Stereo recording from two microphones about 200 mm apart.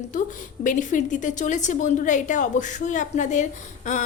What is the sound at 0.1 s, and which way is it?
A woman's voice, 40° left (ahead or behind).